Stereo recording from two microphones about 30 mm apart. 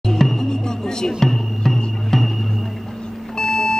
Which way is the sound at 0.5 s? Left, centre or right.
Left.